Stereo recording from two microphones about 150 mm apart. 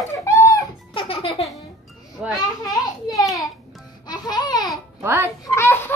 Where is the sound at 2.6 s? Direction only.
25° left (ahead or behind).